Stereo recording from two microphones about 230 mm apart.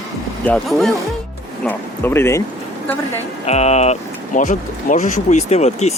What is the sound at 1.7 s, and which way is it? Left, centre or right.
Music, centre.